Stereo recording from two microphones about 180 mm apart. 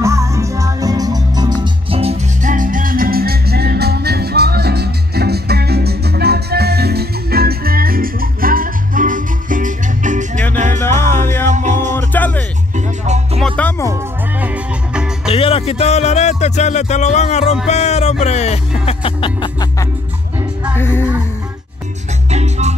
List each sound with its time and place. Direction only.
0.0 s music: 15° right (ahead or behind); by 10.8 s 40° right (ahead or behind)
10.8 s music: 15° left (ahead or behind)
11.4 s music: 40° right (ahead or behind)
11.9 s music: 10° left (ahead or behind)
12.7 s music: 40° right (ahead or behind)
13.6 s music: 10° left (ahead or behind)
14.4 s music: 5° right (ahead or behind)
15.3 s music: 30° left (ahead or behind)
20.7 s music: 10° left (ahead or behind)
22.3 s music: 40° right (ahead or behind)